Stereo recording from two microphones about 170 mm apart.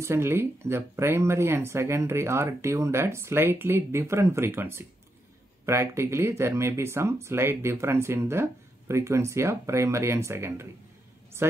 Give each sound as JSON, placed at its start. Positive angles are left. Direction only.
{"t": 0.0, "sound": "speech", "side_deg": -15}